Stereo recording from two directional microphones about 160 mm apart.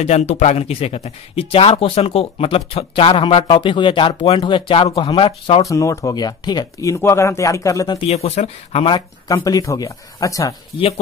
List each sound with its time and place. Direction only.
0.0 s speech: 45° left (ahead or behind)
5.6 s speech: 20° left (ahead or behind)
8.0 s speech: 40° left (ahead or behind)
9.3 s speech: 20° left (ahead or behind)